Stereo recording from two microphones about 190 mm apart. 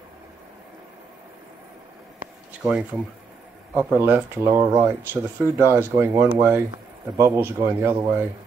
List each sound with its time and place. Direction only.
2.6 s speech: 5° right (ahead or behind)